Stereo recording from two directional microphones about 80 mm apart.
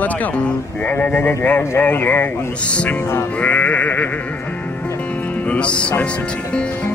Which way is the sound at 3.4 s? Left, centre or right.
Centre.